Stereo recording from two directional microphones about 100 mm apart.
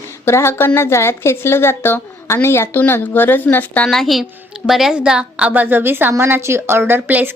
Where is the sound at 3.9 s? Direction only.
Centre (ahead or behind); by 7.3 s 20° right (ahead or behind).